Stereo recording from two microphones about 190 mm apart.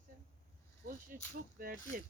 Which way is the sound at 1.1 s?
50° right (ahead or behind).